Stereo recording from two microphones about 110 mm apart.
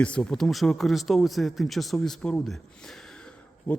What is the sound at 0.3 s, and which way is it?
Speech, 5° left (ahead or behind).